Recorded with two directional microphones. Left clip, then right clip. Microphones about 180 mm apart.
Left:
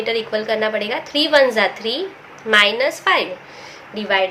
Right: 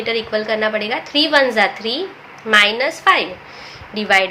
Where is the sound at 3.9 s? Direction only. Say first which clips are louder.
Right 3 dB; 25° right (ahead or behind).